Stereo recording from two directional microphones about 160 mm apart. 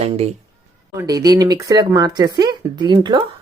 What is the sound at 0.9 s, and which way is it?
Speech, 20° right (ahead or behind).